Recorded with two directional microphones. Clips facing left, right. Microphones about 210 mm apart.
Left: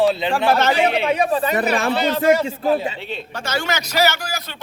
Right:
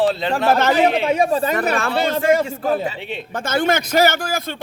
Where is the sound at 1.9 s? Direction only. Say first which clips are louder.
Even; 50° right (ahead or behind).